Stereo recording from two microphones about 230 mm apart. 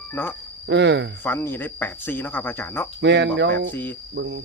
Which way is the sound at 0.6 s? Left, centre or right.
Right.